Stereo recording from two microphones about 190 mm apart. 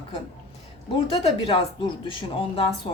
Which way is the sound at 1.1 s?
30° left (ahead or behind).